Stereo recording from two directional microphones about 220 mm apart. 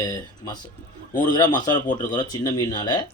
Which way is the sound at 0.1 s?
15° left (ahead or behind).